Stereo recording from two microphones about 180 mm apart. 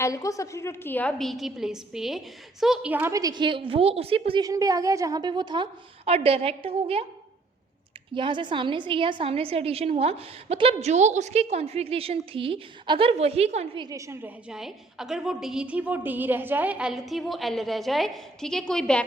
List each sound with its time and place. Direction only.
0.0 s a woman's voice: 20° left (ahead or behind); by 7.0 s 30° right (ahead or behind)
8.1 s a woman's voice: 25° right (ahead or behind)
13.8 s a woman's voice: 15° right (ahead or behind); by 19.0 s 5° left (ahead or behind)